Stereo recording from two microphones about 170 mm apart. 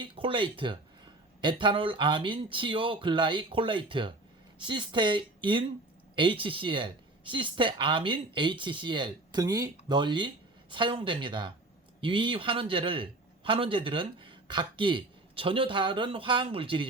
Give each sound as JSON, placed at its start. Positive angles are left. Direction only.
{"t": 0.0, "sound": "a man's voice", "side_deg": -30}